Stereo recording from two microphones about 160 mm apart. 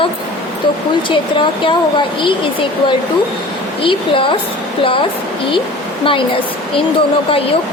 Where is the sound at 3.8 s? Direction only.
35° left (ahead or behind).